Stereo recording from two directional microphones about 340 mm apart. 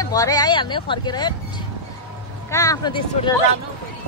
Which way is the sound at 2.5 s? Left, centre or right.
Centre.